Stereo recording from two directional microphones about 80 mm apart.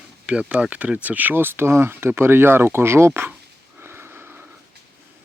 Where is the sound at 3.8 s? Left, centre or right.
Right.